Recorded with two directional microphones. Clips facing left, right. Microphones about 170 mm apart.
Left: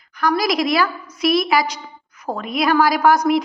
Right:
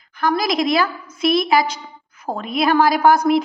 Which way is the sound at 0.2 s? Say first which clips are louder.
Even; 25° right (ahead or behind).